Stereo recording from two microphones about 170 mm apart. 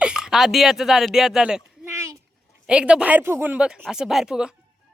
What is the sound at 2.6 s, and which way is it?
Speech, 5° right (ahead or behind).